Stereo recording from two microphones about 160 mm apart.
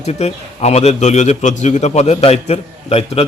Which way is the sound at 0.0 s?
40° left (ahead or behind).